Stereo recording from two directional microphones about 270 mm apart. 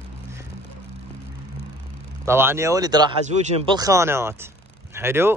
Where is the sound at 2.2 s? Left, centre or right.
Centre.